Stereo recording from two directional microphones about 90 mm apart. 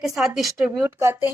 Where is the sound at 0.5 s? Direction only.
25° right (ahead or behind).